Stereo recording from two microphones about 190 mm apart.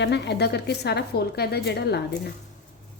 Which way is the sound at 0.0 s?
60° left (ahead or behind).